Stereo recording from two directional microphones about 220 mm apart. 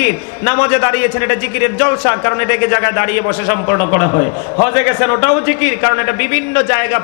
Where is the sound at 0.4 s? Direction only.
15° left (ahead or behind).